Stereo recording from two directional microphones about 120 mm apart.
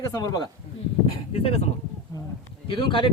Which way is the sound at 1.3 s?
55° left (ahead or behind).